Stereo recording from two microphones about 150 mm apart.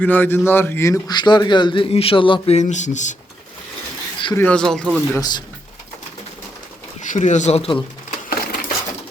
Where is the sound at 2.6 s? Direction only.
50° left (ahead or behind).